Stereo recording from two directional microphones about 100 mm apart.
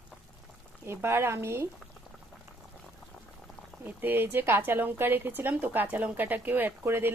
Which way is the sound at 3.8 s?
20° right (ahead or behind).